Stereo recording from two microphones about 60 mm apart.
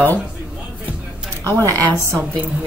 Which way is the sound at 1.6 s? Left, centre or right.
Right.